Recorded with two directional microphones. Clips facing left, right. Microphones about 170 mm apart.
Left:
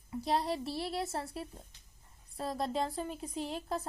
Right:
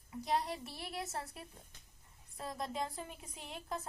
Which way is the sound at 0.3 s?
30° left (ahead or behind).